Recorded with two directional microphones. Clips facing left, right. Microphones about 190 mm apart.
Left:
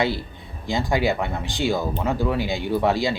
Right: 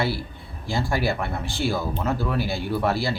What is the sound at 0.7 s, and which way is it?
Speech, 20° left (ahead or behind).